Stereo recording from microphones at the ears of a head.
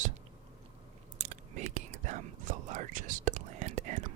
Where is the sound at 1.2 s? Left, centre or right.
Right.